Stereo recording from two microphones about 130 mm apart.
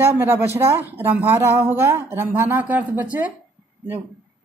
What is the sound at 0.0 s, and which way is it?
A woman's voice, 20° right (ahead or behind).